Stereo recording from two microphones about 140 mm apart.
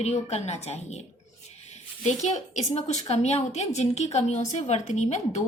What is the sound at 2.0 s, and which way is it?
A woman's voice, 55° left (ahead or behind).